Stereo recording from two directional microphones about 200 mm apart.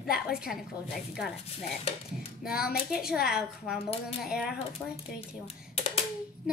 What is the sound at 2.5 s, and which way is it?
Speech, 50° left (ahead or behind).